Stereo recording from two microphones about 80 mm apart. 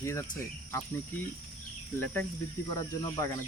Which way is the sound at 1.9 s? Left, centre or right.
Left.